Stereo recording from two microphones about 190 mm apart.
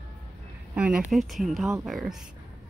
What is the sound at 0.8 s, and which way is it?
A woman's voice, 5° right (ahead or behind).